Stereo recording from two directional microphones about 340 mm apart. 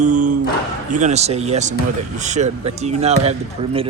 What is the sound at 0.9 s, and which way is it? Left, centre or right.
Speech, centre.